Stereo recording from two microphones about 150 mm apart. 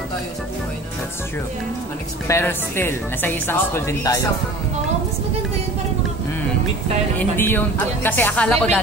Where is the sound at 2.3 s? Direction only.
15° left (ahead or behind).